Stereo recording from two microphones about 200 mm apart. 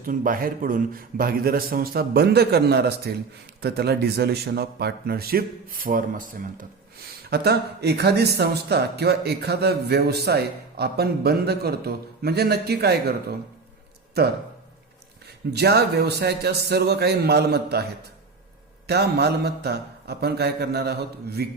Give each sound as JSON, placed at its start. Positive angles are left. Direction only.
{"t": 0.1, "sound": "speech", "side_deg": -45}
{"t": 15.5, "sound": "a man's voice", "side_deg": -55}
{"t": 18.9, "sound": "speech", "side_deg": -55}